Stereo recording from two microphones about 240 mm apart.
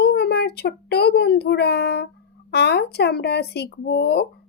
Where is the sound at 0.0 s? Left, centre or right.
Left.